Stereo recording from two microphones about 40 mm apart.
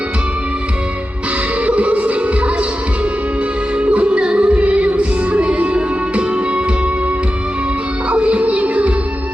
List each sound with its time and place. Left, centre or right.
1.6 s music: right
3.8 s music: right
8.1 s music: right